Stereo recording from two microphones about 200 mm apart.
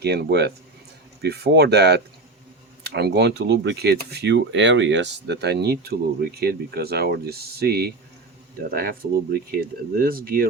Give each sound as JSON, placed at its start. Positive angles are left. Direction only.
{"t": 0.0, "sound": "speech", "side_deg": -55}